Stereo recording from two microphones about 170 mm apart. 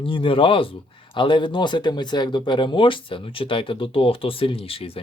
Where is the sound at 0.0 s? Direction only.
30° left (ahead or behind).